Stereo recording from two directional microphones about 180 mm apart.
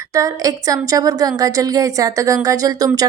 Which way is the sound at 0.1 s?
20° right (ahead or behind).